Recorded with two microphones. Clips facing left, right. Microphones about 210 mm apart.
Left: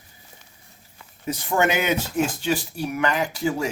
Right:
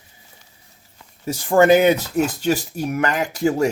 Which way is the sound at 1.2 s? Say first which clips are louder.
Right 7 dB; 35° right (ahead or behind).